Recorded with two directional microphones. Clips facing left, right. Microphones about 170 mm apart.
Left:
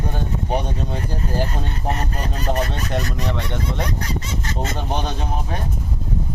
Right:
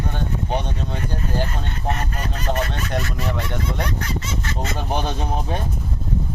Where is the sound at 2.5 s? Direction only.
5° left (ahead or behind).